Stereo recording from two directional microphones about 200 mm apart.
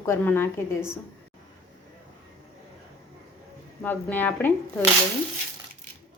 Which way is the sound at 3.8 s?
10° left (ahead or behind).